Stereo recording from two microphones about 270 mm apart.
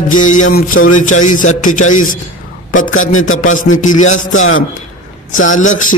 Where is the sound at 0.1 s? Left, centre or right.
Left.